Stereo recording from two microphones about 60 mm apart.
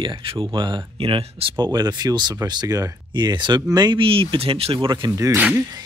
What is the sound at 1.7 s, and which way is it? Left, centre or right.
Speech, right.